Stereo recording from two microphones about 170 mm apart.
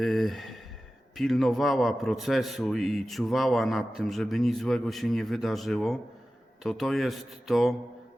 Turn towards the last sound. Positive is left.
turn(degrees=0)  # may be behind; listen again after turning